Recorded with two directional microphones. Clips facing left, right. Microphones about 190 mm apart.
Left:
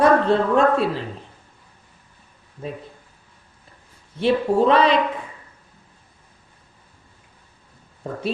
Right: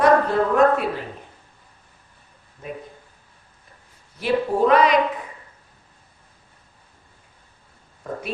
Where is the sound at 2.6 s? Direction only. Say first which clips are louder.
Left 3 dB; 30° left (ahead or behind).